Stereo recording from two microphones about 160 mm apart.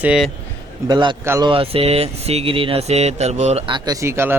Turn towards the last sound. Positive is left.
turn(degrees=-15)  # may be behind; listen again after turning